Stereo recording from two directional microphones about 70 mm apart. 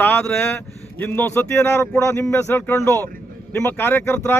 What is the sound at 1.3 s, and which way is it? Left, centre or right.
Speech, left.